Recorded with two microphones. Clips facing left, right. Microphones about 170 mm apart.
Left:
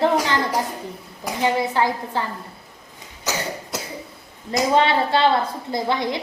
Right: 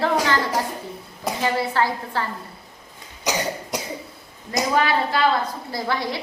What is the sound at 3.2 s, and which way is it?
Cough, 15° right (ahead or behind).